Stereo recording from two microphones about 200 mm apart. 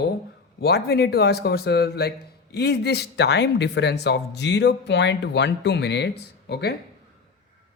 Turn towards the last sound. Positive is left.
turn(degrees=55)  # may be behind; listen again after turning